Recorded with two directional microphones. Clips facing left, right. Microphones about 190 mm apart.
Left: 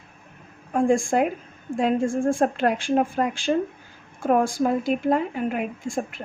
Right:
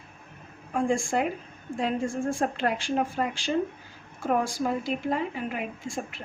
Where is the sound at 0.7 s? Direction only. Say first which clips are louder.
Left 6 dB; 50° left (ahead or behind).